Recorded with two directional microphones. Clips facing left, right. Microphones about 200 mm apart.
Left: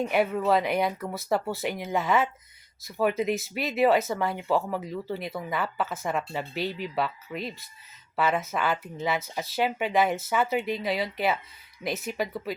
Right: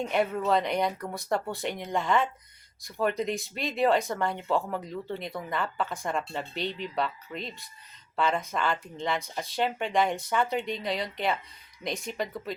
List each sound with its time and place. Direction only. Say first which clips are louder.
0.0 s speech: left 2 dB; 5° left (ahead or behind)